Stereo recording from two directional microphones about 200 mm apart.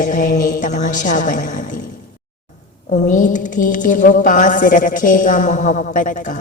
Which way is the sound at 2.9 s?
40° left (ahead or behind).